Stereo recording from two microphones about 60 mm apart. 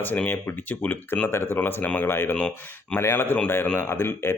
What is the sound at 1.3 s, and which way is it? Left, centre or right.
Speech, left.